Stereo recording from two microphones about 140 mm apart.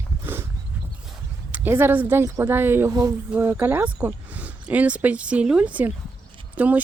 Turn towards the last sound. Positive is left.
turn(degrees=-10)  # may be behind; listen again after turning